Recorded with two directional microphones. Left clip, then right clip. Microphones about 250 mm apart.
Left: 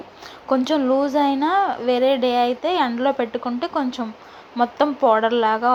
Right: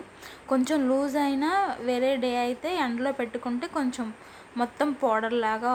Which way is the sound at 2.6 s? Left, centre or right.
Centre.